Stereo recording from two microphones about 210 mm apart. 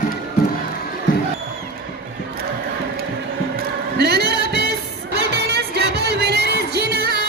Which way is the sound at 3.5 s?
50° right (ahead or behind).